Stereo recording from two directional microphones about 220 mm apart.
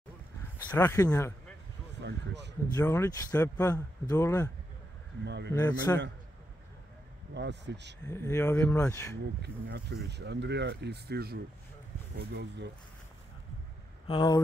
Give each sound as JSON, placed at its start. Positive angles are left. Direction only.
{"t": 0.7, "sound": "speech", "side_deg": 10}
{"t": 2.0, "sound": "speech", "side_deg": -50}
{"t": 2.7, "sound": "speech", "side_deg": 15}
{"t": 5.2, "sound": "speech", "side_deg": -50}
{"t": 5.5, "sound": "speech", "side_deg": 10}
{"t": 7.3, "sound": "speech", "side_deg": -50}
{"t": 8.0, "sound": "speech", "side_deg": 10}
{"t": 9.4, "sound": "speech", "side_deg": -50}
{"t": 14.0, "sound": "speech", "side_deg": 20}